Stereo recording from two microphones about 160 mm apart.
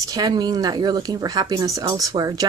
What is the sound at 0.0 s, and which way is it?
Speech, 25° right (ahead or behind).